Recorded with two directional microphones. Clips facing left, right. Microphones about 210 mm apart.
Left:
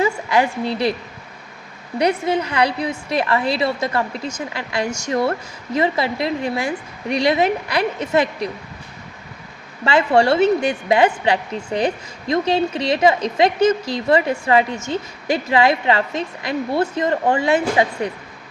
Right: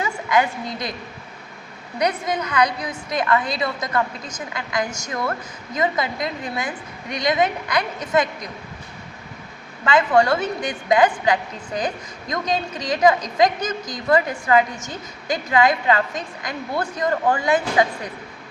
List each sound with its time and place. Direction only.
0.0 s a woman's voice: 30° left (ahead or behind)
2.0 s a woman's voice: 30° left (ahead or behind)
9.8 s a woman's voice: 30° left (ahead or behind)